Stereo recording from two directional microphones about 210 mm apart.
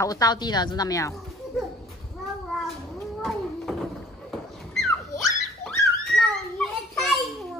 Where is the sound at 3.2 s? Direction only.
Centre (ahead or behind).